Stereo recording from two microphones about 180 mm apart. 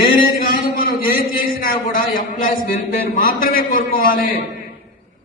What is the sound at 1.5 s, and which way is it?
A man's voice, 50° left (ahead or behind).